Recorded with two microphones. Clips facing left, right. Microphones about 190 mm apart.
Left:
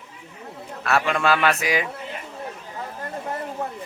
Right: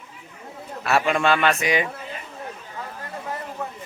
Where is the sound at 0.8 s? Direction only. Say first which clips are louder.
Right 1 dB; centre (ahead or behind).